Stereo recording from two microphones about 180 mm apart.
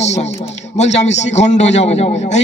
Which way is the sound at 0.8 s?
40° left (ahead or behind).